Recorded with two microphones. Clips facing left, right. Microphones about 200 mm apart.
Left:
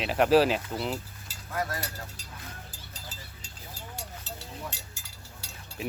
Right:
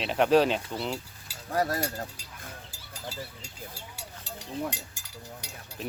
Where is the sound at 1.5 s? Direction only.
40° right (ahead or behind).